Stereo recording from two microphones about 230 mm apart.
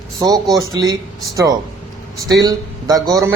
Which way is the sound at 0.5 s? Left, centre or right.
Centre.